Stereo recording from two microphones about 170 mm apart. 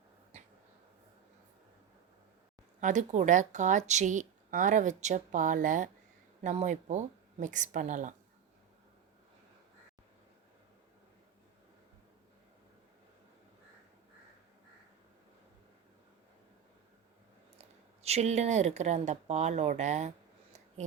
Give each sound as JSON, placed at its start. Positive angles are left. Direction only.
{"t": 0.3, "sound": "a sound", "side_deg": -40}
{"t": 2.8, "sound": "speech", "side_deg": -45}
{"t": 18.0, "sound": "speech", "side_deg": -40}